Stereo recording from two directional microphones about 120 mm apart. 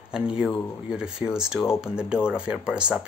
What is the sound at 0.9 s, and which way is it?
Speech, 5° right (ahead or behind).